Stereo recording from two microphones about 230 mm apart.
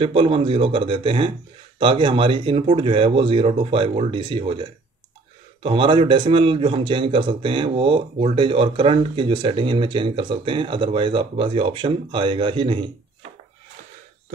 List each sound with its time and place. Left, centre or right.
0.0 s a man's voice: right